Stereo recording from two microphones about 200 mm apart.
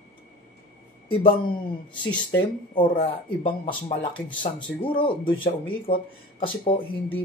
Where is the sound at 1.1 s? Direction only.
25° left (ahead or behind).